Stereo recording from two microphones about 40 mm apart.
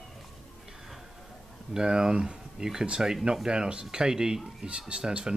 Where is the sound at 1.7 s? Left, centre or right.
Centre.